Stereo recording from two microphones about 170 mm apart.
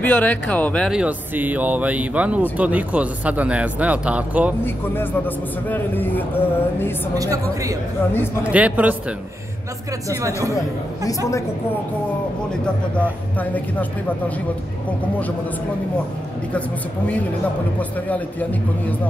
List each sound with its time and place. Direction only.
0.0 s a man's voice: 10° left (ahead or behind)
0.8 s speech: 5° right (ahead or behind)
4.6 s a man's voice: 10° left (ahead or behind)
7.2 s speech: 20° right (ahead or behind)
8.5 s speech: 10° right (ahead or behind)
10.0 s speech: 20° right (ahead or behind)
13.4 s a man's voice: 10° left (ahead or behind)
17.7 s a man's voice: 10° left (ahead or behind)